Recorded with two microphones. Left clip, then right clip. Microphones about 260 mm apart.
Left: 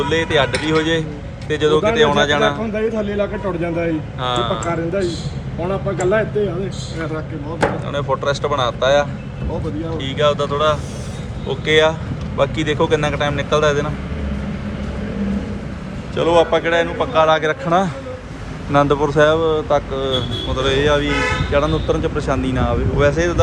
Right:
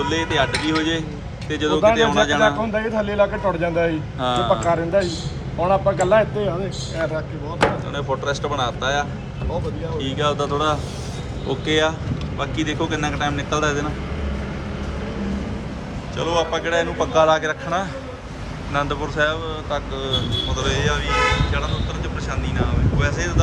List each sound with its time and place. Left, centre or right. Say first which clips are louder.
0.0 s speech: left 4 dB; centre
2.7 s speech: even; centre
4.2 s speech: right 1 dB; centre
5.6 s speech: right 2 dB; centre
7.9 s speech: left 4 dB; centre
16.1 s speech: left 7 dB; centre